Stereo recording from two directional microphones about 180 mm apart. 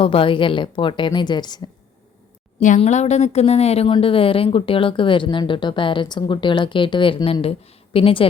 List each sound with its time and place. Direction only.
0.0 s a woman's voice: 30° left (ahead or behind)
2.6 s a woman's voice: 45° left (ahead or behind)